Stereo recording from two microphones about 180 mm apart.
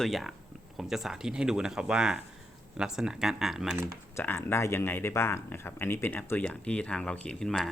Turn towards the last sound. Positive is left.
turn(degrees=5)  # may be behind; listen again after turning